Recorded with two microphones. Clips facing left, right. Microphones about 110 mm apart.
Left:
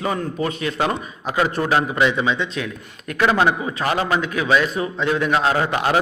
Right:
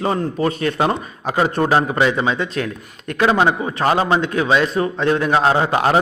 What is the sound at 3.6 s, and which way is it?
A man's voice, 35° right (ahead or behind).